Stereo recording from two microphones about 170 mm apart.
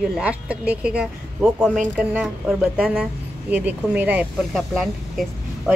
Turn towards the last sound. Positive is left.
turn(degrees=0)  # may be behind; listen again after turning